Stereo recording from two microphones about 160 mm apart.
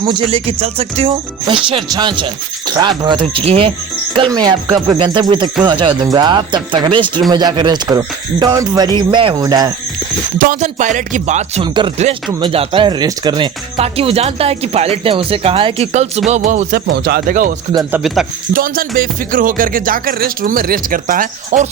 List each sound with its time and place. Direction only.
0.0 s speech: 30° right (ahead or behind)
10.3 s music: 55° right (ahead or behind)
11.6 s speech: 30° right (ahead or behind)
16.4 s music: 55° right (ahead or behind)
16.9 s speech: 85° right; by 17.5 s 60° right (ahead or behind)
17.9 s speech: centre (ahead or behind)
18.5 s music: 65° right (ahead or behind)